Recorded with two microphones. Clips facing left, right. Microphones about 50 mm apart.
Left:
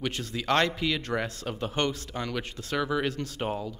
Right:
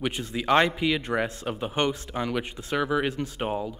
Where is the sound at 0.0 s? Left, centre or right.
Centre.